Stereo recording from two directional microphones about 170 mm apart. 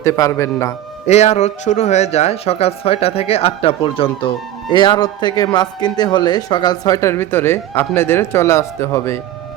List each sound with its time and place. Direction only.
0.0 s a man's voice: 15° left (ahead or behind)
1.0 s a man's voice: 40° left (ahead or behind); by 9.2 s 15° left (ahead or behind)